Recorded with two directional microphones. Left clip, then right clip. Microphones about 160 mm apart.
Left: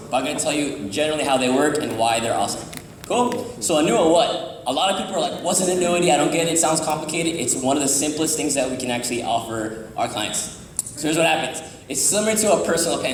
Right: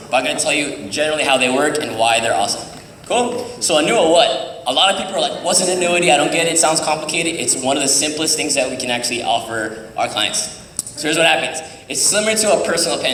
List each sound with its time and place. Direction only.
0.1 s a man's voice: 30° left (ahead or behind)
11.0 s a man's voice: 30° left (ahead or behind)